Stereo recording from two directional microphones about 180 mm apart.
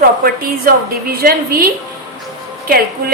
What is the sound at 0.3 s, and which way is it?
A woman's voice, 55° right (ahead or behind).